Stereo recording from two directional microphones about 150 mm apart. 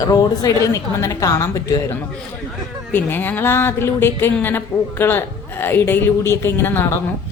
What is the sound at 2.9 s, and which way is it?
A woman's voice, 15° left (ahead or behind).